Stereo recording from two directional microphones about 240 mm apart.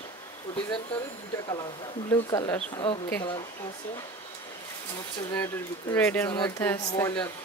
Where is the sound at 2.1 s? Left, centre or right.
Centre.